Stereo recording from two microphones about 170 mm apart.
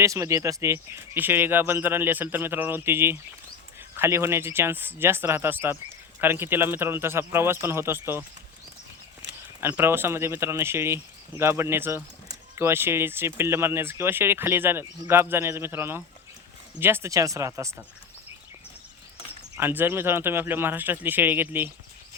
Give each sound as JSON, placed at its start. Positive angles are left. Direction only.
{"t": 0.0, "sound": "speech", "side_deg": -20}
{"t": 9.6, "sound": "speech", "side_deg": -15}
{"t": 19.5, "sound": "speech", "side_deg": -10}